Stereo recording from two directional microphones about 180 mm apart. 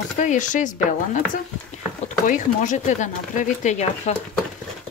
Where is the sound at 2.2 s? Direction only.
45° left (ahead or behind).